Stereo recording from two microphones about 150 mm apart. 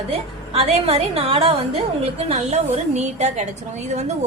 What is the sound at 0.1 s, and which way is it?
A woman's voice, 40° right (ahead or behind).